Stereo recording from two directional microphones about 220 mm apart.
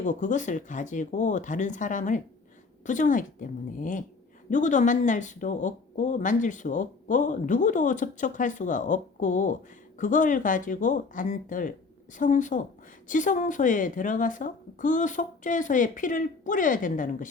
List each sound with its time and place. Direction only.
0.0 s speech: 35° left (ahead or behind)